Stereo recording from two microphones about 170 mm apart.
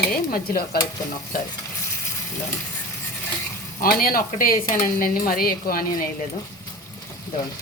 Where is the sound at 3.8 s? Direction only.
60° left (ahead or behind).